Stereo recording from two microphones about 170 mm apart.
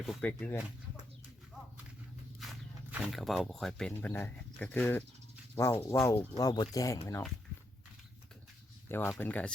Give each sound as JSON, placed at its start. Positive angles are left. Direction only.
{"t": 0.0, "sound": "speech", "side_deg": 5}
{"t": 2.4, "sound": "speech", "side_deg": 0}
{"t": 8.9, "sound": "speech", "side_deg": 10}